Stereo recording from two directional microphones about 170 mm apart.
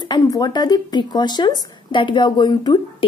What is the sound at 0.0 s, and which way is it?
Speech, 25° left (ahead or behind).